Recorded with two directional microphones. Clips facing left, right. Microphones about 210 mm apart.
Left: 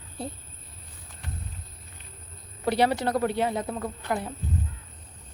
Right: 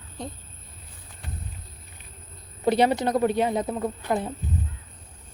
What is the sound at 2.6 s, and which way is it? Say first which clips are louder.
Speech: right 3 dB; 20° right (ahead or behind).